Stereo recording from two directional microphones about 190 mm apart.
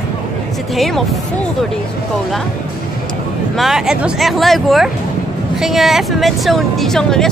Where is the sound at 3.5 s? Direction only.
Centre (ahead or behind).